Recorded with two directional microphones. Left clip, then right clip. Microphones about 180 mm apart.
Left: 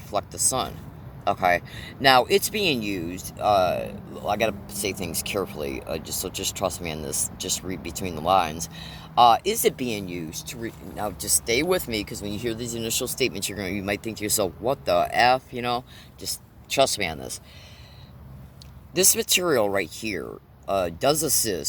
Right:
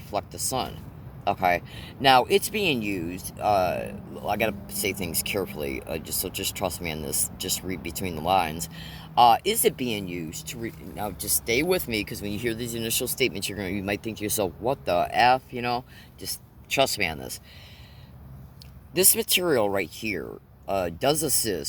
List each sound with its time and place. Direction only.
0.1 s speech: 35° right (ahead or behind)
18.9 s speech: 35° right (ahead or behind)